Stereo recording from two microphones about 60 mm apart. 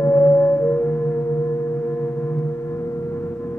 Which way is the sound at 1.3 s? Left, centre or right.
Left.